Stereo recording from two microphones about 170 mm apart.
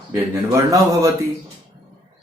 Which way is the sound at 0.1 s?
20° right (ahead or behind).